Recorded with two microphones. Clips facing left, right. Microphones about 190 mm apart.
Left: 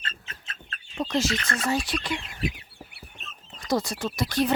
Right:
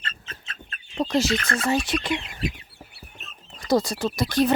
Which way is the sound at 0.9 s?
35° right (ahead or behind).